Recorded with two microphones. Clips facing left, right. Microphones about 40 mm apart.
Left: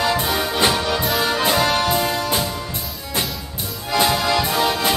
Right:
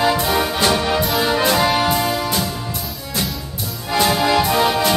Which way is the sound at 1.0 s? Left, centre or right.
Centre.